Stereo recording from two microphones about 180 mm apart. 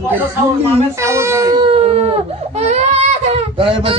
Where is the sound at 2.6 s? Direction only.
35° right (ahead or behind).